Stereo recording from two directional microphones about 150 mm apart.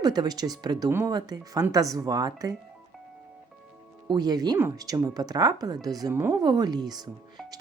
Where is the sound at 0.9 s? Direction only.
15° right (ahead or behind).